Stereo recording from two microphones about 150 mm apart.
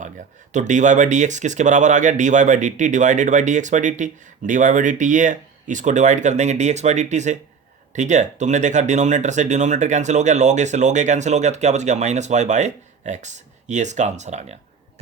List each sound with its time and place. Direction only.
0.5 s speech: 55° right (ahead or behind)